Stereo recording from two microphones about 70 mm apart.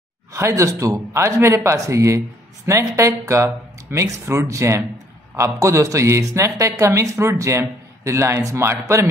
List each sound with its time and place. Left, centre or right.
0.3 s speech: right